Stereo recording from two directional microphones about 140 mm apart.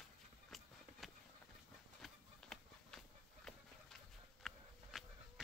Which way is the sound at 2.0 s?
Centre (ahead or behind).